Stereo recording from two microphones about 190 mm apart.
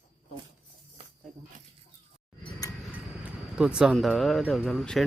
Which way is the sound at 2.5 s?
20° left (ahead or behind).